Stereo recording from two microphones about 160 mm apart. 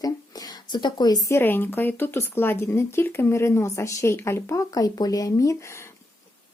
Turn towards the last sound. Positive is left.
turn(degrees=20)  # may be behind; listen again after turning